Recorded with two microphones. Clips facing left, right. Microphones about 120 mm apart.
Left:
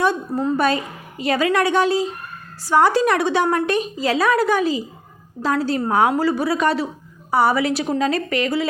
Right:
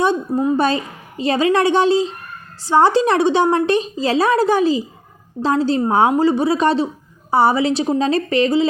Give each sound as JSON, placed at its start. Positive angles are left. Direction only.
{"t": 0.0, "sound": "a woman's voice", "side_deg": -20}
{"t": 0.5, "sound": "a woman's voice", "side_deg": -25}